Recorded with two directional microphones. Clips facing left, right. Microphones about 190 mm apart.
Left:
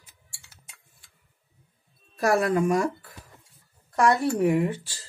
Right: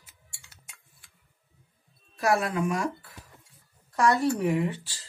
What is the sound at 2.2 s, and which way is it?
Speech, 45° left (ahead or behind).